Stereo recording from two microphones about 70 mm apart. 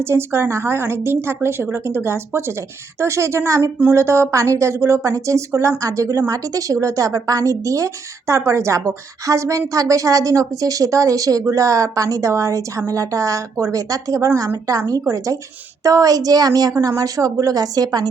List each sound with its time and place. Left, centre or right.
0.0 s a woman's voice: right
6.5 s a woman's voice: right